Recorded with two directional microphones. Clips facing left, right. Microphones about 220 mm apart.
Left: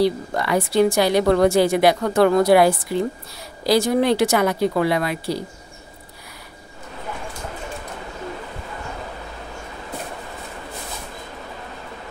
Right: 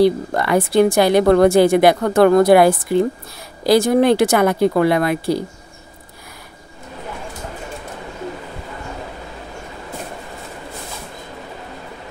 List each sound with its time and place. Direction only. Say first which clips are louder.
0.0 s a woman's voice: right 5 dB; 55° right (ahead or behind)